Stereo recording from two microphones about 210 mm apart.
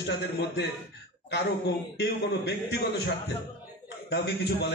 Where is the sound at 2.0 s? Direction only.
55° left (ahead or behind).